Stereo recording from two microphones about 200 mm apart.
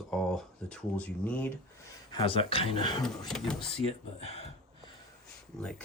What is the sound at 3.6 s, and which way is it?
Speech, 30° left (ahead or behind).